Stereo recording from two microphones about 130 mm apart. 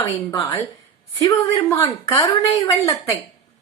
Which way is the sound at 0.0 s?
25° left (ahead or behind).